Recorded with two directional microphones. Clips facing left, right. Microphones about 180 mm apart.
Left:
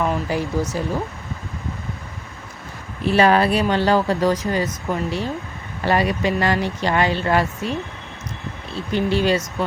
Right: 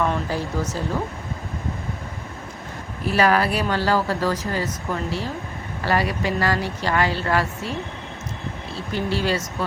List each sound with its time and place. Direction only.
0.0 s speech: 15° left (ahead or behind)
3.0 s speech: 25° left (ahead or behind)